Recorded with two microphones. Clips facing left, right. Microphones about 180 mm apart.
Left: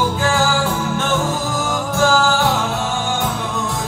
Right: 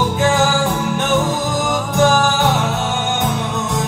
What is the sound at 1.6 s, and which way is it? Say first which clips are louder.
Music: right 3 dB; 20° right (ahead or behind).